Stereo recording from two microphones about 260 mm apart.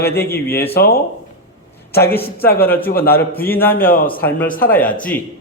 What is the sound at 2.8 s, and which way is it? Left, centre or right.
Speech, left.